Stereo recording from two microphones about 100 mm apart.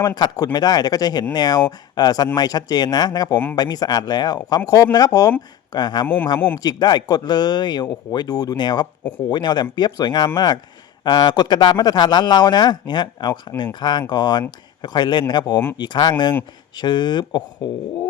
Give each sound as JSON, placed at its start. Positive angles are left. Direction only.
{"t": 0.0, "sound": "speech", "side_deg": 40}